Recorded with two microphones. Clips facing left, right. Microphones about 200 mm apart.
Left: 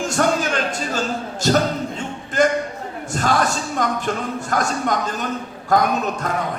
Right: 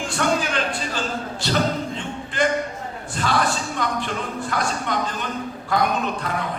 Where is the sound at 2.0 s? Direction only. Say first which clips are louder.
Left 5 dB; 45° left (ahead or behind).